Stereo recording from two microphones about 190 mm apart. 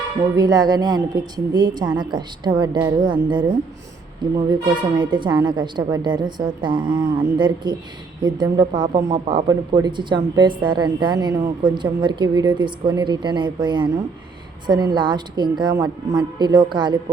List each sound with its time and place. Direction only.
0.3 s a woman's voice: 20° right (ahead or behind)